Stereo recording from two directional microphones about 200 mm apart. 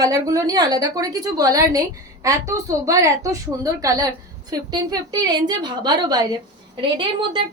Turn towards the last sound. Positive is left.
turn(degrees=-20)  # may be behind; listen again after turning